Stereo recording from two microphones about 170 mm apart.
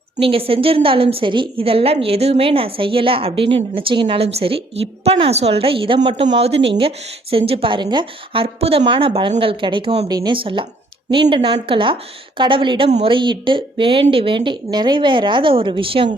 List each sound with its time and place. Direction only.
0.2 s a woman's voice: 35° right (ahead or behind)